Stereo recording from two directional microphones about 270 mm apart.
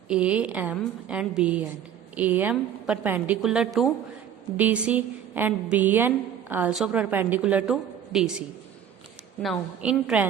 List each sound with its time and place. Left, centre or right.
0.1 s a woman's voice: centre